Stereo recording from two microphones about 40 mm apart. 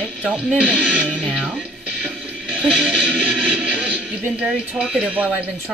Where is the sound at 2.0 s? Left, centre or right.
Right.